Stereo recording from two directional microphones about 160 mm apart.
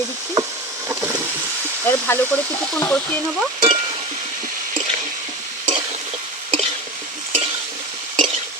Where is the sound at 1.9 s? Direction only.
15° left (ahead or behind).